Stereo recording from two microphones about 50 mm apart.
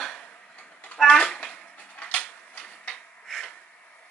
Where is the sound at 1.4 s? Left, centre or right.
Left.